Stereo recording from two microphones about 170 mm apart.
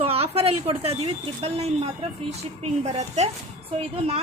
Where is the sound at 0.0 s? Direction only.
35° right (ahead or behind).